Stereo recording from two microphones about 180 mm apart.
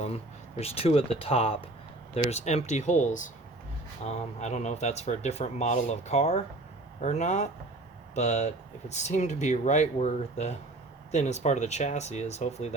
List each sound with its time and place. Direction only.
0.0 s speech: 35° left (ahead or behind)